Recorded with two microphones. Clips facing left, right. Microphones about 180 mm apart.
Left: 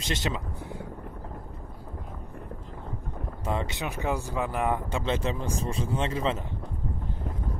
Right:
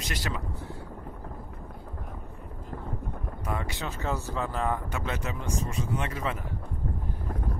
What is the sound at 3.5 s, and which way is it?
Speech, 25° left (ahead or behind).